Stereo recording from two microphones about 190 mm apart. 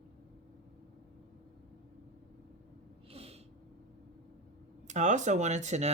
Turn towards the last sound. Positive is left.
turn(degrees=-35)  # may be behind; listen again after turning